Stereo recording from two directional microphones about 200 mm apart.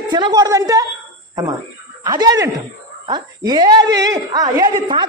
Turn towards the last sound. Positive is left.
turn(degrees=-20)  # may be behind; listen again after turning